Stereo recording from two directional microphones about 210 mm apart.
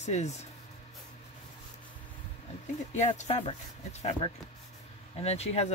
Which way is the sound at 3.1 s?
30° left (ahead or behind).